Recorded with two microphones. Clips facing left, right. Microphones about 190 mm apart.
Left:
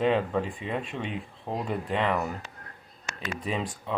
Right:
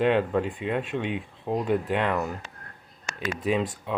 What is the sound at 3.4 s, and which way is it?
Speech, centre (ahead or behind).